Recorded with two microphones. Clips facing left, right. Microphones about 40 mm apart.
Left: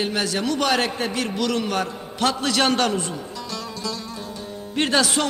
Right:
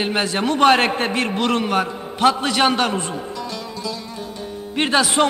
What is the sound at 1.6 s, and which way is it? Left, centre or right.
A woman's voice, right.